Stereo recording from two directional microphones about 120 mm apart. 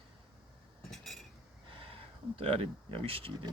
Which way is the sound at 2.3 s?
50° right (ahead or behind).